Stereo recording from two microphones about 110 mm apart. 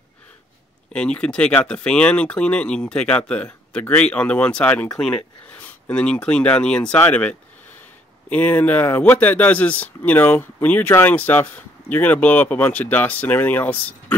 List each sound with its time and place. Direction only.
0.9 s speech: 10° left (ahead or behind)